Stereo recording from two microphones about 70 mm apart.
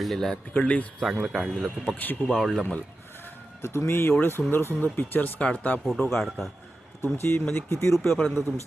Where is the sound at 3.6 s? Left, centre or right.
Left; by 5.8 s centre.